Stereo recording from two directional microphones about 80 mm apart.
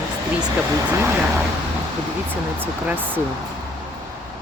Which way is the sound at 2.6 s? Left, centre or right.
Right.